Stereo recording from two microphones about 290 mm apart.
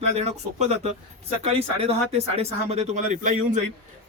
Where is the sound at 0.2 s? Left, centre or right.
Right.